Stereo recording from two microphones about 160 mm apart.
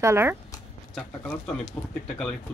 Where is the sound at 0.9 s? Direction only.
5° left (ahead or behind).